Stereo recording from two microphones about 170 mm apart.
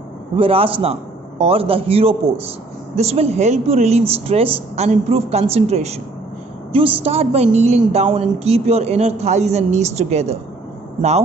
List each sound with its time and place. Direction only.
0.4 s a woman's voice: 35° right (ahead or behind)